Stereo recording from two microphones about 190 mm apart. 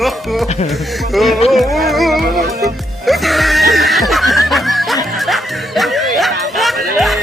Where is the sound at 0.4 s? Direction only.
35° left (ahead or behind).